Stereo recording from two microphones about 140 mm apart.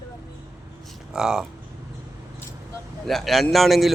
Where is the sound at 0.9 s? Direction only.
5° right (ahead or behind).